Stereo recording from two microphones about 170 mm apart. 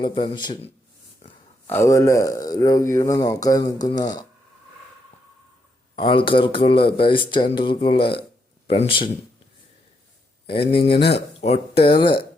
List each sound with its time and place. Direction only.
0.0 s speech: 30° left (ahead or behind)
1.6 s speech: 15° left (ahead or behind)
6.0 s speech: 30° left (ahead or behind)
10.7 s speech: 35° left (ahead or behind)